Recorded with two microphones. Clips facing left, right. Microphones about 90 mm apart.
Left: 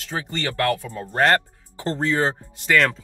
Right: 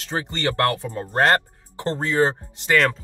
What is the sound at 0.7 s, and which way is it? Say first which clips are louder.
Speech: right 1 dB; 25° right (ahead or behind).